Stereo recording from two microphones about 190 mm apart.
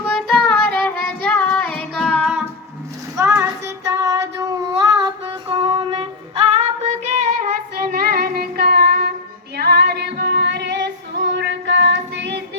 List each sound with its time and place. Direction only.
0.2 s music: 5° left (ahead or behind)
1.0 s child singing: 5° left (ahead or behind)
3.2 s child singing: 15° right (ahead or behind); by 7.5 s 35° right (ahead or behind)
7.8 s child singing: 55° right (ahead or behind)
9.6 s female singing: 55° right (ahead or behind)